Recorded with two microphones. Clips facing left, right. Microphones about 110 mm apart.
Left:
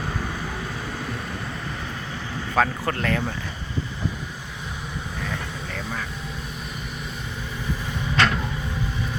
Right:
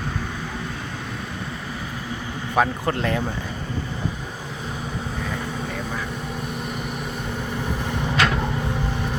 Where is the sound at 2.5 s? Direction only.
20° right (ahead or behind).